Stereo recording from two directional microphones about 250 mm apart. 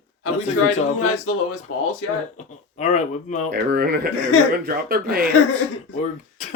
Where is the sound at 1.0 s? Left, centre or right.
Left.